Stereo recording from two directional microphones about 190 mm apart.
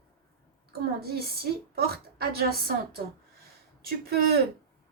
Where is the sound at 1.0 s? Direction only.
55° right (ahead or behind).